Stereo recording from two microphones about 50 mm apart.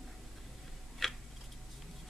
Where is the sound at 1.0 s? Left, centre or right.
Centre.